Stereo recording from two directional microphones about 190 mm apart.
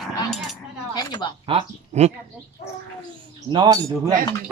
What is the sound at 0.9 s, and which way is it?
Speech, 20° left (ahead or behind).